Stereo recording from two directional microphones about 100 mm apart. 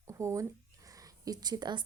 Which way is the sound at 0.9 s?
35° right (ahead or behind).